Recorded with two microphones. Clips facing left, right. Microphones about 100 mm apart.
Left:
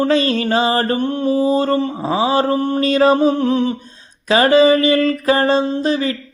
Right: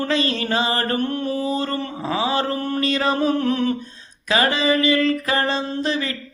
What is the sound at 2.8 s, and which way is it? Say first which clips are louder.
Mantra: left 8 dB; 35° left (ahead or behind).